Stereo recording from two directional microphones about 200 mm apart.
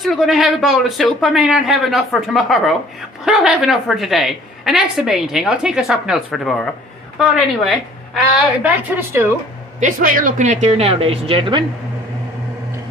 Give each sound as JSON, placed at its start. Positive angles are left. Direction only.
{"t": 0.0, "sound": "a woman's voice", "side_deg": 0}
{"t": 9.8, "sound": "speech", "side_deg": -40}